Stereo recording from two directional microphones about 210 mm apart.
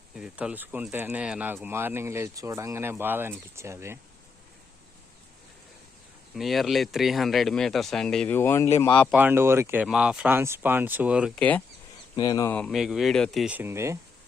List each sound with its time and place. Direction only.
0.2 s speech: 5° right (ahead or behind)
6.3 s speech: centre (ahead or behind)
9.1 s speech: 10° right (ahead or behind)
12.1 s speech: 20° left (ahead or behind)
12.5 s speech: centre (ahead or behind)